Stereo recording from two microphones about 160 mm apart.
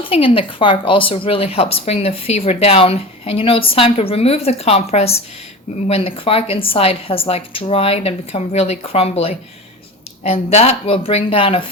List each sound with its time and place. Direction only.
0.0 s a woman's voice: 35° left (ahead or behind)